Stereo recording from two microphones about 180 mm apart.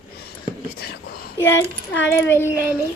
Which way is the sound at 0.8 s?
60° left (ahead or behind).